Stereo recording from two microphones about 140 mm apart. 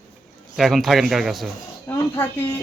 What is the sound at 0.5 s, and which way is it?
Speech, centre (ahead or behind).